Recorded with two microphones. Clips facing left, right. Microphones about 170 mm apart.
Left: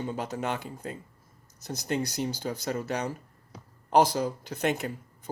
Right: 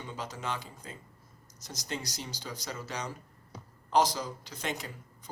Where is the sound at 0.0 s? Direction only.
55° left (ahead or behind).